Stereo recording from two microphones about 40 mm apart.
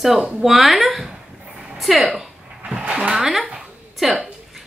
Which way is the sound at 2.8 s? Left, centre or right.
Right.